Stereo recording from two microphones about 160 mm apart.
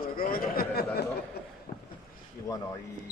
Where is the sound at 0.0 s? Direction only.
65° left (ahead or behind).